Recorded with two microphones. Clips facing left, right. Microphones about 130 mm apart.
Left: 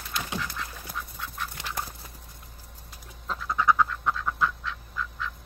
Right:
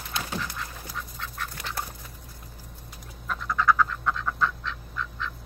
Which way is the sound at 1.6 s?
25° left (ahead or behind).